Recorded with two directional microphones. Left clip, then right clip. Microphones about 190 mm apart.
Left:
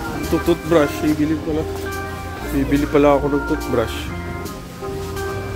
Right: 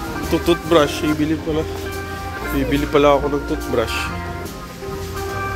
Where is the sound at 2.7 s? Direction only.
15° left (ahead or behind).